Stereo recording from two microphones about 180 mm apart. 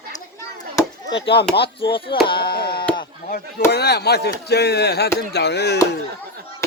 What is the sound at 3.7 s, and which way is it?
Speech, 65° left (ahead or behind).